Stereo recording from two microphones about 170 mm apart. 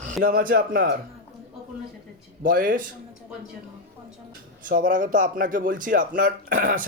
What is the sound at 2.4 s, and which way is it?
Speech, 55° right (ahead or behind).